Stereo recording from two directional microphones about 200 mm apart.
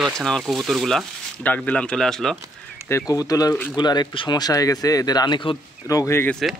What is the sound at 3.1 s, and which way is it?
Speech, 20° left (ahead or behind).